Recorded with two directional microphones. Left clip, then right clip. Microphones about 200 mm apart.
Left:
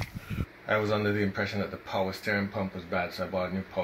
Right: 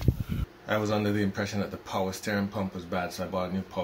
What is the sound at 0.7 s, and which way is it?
Speech, centre (ahead or behind).